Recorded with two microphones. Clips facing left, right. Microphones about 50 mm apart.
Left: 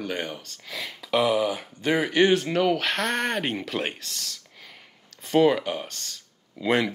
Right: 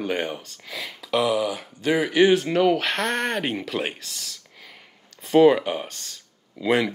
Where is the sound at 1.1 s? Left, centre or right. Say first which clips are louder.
Even; centre.